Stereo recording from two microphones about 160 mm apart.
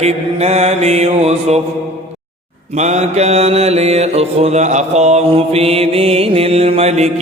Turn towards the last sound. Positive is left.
turn(degrees=-45)  # may be behind; listen again after turning